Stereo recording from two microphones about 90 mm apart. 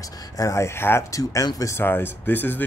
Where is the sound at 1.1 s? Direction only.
40° left (ahead or behind).